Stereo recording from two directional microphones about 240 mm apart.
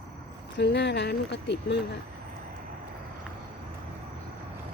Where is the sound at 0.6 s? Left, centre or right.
Left.